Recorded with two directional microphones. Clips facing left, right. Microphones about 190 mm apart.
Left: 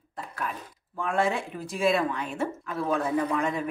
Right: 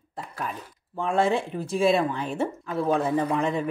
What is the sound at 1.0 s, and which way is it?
A woman's voice, 25° right (ahead or behind).